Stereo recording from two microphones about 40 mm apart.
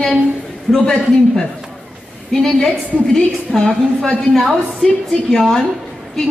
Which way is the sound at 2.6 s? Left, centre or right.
Centre.